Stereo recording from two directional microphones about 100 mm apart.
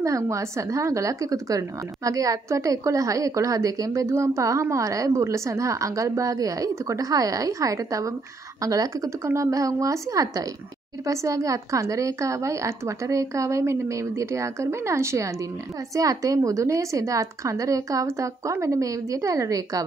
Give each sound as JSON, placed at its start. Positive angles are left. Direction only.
{"t": 0.0, "sound": "a woman's voice", "side_deg": -30}